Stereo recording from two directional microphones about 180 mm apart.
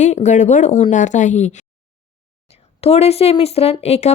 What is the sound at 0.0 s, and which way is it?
Speech, 40° left (ahead or behind).